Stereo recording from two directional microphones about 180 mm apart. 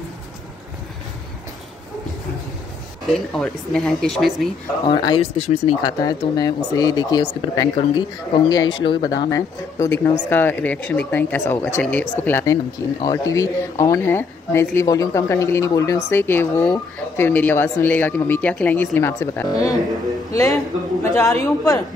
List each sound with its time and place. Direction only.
3.1 s speech: centre (ahead or behind)
4.8 s speech: 25° left (ahead or behind)
5.8 s a woman's voice: 20° left (ahead or behind)